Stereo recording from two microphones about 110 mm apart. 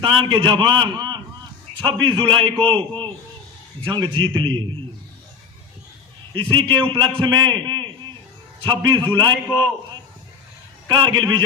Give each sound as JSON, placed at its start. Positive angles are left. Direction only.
{"t": 0.0, "sound": "a man's voice", "side_deg": -45}
{"t": 6.3, "sound": "a man's voice", "side_deg": -50}
{"t": 10.8, "sound": "a man's voice", "side_deg": -45}